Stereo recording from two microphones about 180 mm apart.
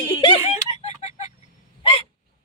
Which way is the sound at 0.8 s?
40° left (ahead or behind).